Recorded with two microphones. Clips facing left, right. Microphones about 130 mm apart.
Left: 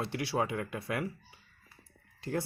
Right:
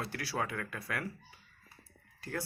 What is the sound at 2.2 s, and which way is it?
Speech, 25° left (ahead or behind).